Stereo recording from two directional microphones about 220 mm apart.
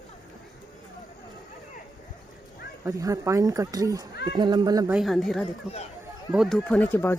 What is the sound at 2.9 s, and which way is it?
Speech, 15° right (ahead or behind).